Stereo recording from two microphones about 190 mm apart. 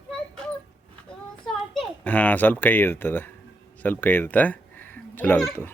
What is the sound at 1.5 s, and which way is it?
A child's voice, centre (ahead or behind).